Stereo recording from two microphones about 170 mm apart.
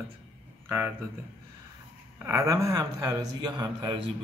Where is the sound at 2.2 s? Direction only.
20° right (ahead or behind).